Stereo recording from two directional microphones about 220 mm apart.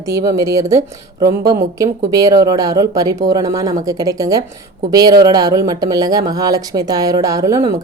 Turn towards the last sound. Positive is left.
turn(degrees=-15)  # may be behind; listen again after turning